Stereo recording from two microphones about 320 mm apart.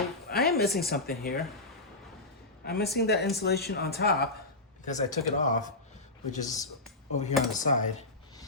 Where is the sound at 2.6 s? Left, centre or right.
Left.